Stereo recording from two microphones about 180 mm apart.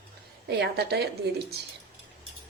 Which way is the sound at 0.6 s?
65° right (ahead or behind).